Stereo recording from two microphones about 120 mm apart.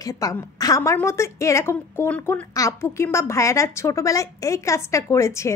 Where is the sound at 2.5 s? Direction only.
25° left (ahead or behind).